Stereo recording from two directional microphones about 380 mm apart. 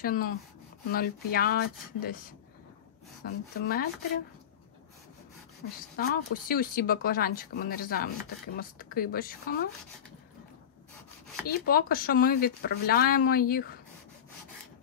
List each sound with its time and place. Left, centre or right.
0.0 s speech: left
5.9 s speech: left
11.4 s speech: left